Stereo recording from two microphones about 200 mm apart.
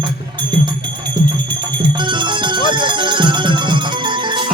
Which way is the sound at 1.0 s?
20° right (ahead or behind).